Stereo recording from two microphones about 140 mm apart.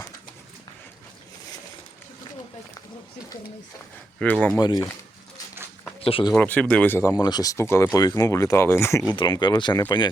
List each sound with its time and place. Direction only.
4.2 s speech: 10° left (ahead or behind)
4.5 s speech: 30° left (ahead or behind)
6.1 s speech: 40° left (ahead or behind)
6.3 s speech: 10° left (ahead or behind)
9.1 s speech: 35° left (ahead or behind)